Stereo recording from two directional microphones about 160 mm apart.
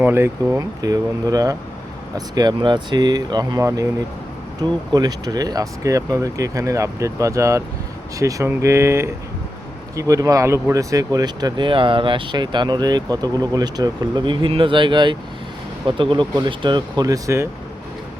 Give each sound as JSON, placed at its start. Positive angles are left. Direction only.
{"t": 0.0, "sound": "speech", "side_deg": -15}
{"t": 4.9, "sound": "speech", "side_deg": -25}